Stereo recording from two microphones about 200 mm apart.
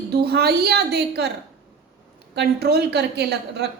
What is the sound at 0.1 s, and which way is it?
A woman's voice, 55° right (ahead or behind).